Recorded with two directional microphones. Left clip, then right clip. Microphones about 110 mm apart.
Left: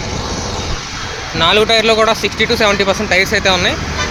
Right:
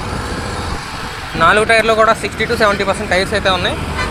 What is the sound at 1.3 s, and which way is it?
Speech, 55° left (ahead or behind).